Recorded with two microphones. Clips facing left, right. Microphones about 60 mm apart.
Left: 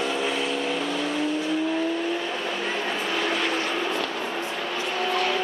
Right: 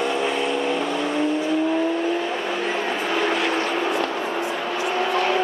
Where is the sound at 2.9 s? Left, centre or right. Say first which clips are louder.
Right 4 dB; centre.